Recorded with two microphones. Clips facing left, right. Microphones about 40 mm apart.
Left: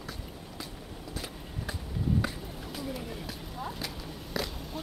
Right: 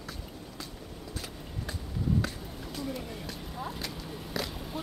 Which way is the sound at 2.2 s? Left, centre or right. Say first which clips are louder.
Left 1 dB; centre.